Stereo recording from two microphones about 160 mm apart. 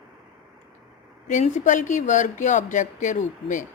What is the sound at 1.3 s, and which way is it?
Speech, 50° left (ahead or behind).